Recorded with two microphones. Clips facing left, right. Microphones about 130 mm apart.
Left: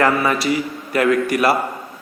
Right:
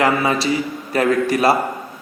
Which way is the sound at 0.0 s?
25° right (ahead or behind).